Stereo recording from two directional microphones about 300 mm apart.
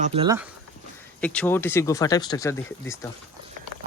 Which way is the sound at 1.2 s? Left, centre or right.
Centre.